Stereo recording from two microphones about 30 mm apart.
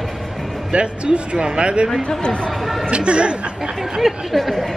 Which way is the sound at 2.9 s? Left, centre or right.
Right.